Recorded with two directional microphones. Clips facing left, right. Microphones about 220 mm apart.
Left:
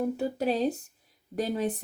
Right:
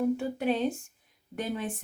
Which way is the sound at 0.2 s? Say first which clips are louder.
Left 1 dB; 40° left (ahead or behind).